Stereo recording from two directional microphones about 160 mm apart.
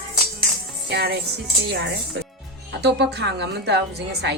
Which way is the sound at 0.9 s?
90° right.